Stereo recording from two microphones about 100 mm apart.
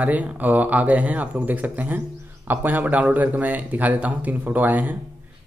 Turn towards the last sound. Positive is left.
turn(degrees=-15)  # may be behind; listen again after turning